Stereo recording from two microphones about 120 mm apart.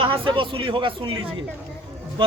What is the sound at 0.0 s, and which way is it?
A man's voice, 45° right (ahead or behind).